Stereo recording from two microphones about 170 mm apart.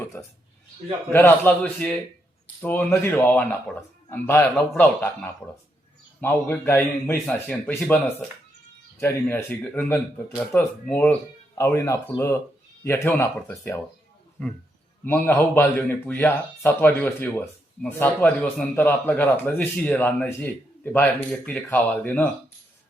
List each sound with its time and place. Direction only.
1.1 s speech: 10° left (ahead or behind)
9.0 s speech: 10° left (ahead or behind)